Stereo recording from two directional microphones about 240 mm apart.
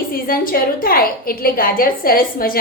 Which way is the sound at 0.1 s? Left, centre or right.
Left.